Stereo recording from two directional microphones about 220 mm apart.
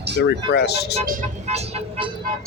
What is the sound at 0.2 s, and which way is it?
Speech, 50° left (ahead or behind).